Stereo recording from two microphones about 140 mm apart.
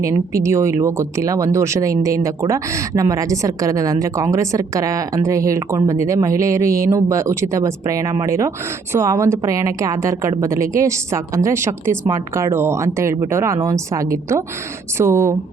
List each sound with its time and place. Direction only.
0.0 s speech: 20° right (ahead or behind)